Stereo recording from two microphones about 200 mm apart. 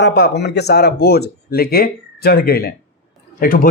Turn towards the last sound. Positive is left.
turn(degrees=45)  # may be behind; listen again after turning